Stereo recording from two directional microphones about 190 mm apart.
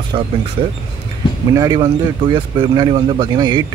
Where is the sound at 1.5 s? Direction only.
20° right (ahead or behind).